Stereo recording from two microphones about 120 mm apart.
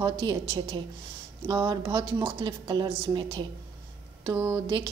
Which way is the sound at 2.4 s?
40° right (ahead or behind).